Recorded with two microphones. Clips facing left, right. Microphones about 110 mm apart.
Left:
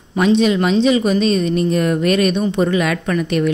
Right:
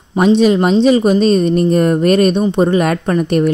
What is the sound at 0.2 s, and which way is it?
A woman's voice, 40° right (ahead or behind).